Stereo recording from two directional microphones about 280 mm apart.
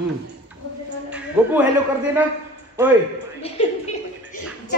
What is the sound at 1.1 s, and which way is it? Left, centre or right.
Speech, centre.